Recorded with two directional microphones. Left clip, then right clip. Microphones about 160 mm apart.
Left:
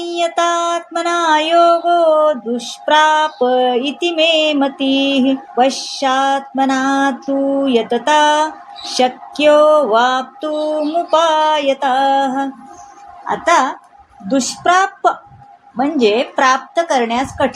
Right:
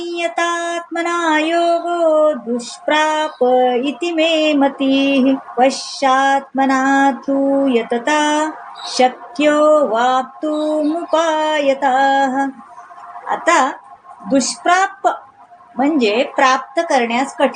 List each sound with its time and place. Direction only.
0.0 s music: 40° left (ahead or behind)
14.3 s a woman's voice: 30° left (ahead or behind)
15.8 s music: 30° left (ahead or behind)